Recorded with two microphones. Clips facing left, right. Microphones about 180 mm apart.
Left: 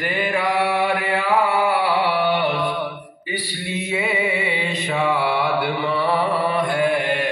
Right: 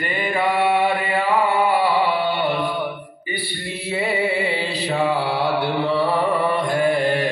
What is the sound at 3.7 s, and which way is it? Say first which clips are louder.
Mantra: even; 30° right (ahead or behind).